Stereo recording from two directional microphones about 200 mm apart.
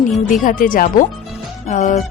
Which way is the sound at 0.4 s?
45° left (ahead or behind).